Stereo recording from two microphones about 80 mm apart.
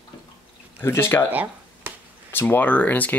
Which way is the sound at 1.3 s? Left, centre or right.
Right.